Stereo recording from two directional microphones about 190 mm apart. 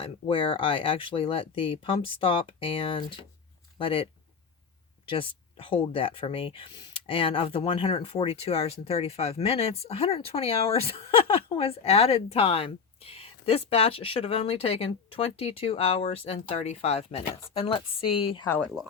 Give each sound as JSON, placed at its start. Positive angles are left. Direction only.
{"t": 0.0, "sound": "speech", "side_deg": 30}
{"t": 18.4, "sound": "speech", "side_deg": 10}